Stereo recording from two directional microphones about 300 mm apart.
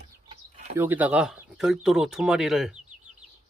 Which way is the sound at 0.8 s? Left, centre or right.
Centre.